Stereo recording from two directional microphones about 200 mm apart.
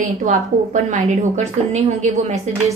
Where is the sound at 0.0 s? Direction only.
40° right (ahead or behind).